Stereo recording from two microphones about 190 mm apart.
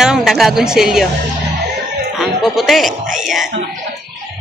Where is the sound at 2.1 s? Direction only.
Centre (ahead or behind).